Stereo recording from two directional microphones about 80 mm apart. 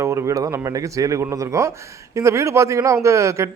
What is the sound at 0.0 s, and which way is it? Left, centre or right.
Speech, right.